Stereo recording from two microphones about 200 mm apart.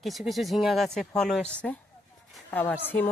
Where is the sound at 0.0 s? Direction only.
Centre (ahead or behind).